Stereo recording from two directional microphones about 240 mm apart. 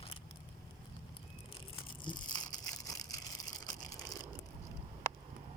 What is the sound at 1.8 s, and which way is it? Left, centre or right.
Crushing, centre.